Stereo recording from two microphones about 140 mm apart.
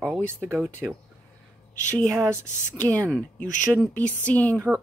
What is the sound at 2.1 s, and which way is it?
Speech, 20° right (ahead or behind).